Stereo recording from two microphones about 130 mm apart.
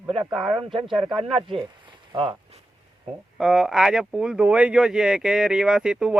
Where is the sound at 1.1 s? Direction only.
45° right (ahead or behind).